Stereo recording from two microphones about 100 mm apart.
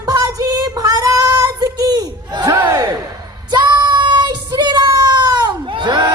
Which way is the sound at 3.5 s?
45° right (ahead or behind).